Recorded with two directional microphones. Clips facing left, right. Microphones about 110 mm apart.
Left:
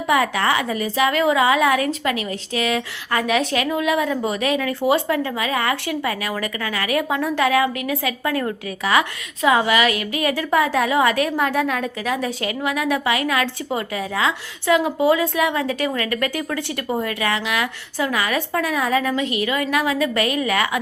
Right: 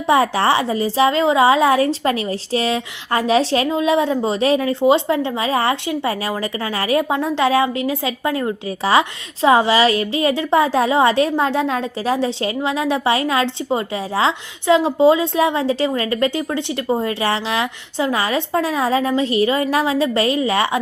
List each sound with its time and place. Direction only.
0.1 s speech: 30° right (ahead or behind)